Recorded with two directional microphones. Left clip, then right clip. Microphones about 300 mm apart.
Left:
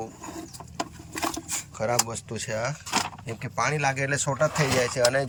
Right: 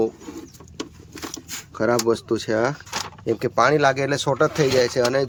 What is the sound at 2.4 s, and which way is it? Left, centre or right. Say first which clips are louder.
Speech: right 4 dB; centre.